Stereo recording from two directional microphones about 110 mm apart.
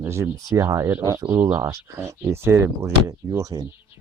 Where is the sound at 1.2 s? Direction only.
20° right (ahead or behind).